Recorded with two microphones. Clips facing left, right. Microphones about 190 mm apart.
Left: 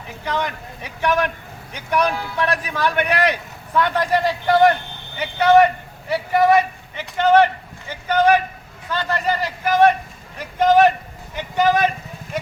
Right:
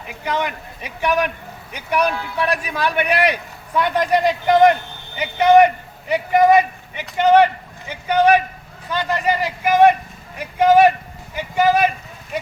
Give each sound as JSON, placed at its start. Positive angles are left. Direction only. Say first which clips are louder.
{"t": 0.3, "sound": "a man's voice", "louder": "right 1 dB", "side_deg": -15}